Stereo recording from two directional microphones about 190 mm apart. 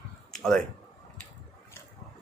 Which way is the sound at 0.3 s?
5° left (ahead or behind).